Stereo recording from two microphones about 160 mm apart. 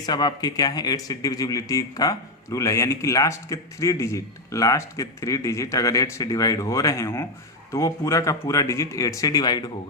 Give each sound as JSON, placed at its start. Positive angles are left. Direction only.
{"t": 0.0, "sound": "speech", "side_deg": 25}